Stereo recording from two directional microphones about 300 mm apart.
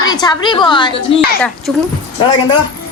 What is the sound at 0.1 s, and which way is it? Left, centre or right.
Speech, centre.